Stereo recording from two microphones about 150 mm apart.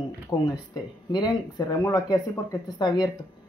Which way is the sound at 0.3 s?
20° left (ahead or behind).